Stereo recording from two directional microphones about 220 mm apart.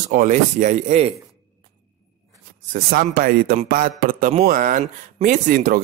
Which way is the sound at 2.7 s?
40° right (ahead or behind).